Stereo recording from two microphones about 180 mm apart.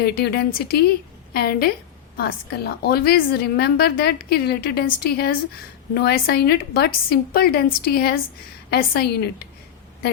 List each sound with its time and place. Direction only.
0.0 s a woman's voice: 60° left (ahead or behind)